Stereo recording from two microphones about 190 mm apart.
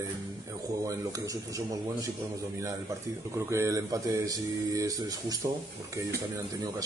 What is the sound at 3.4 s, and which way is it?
Speech, 15° right (ahead or behind).